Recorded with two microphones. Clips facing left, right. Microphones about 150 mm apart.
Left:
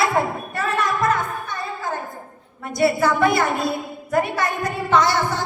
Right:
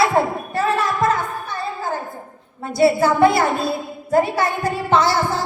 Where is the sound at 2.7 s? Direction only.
30° right (ahead or behind).